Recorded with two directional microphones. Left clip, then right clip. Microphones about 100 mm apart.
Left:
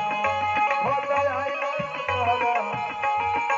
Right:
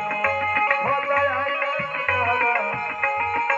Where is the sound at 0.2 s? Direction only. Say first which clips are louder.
Right 3 dB; 45° left (ahead or behind).